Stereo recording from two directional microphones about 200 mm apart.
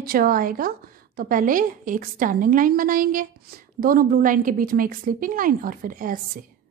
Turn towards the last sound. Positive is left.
turn(degrees=-45)  # may be behind; listen again after turning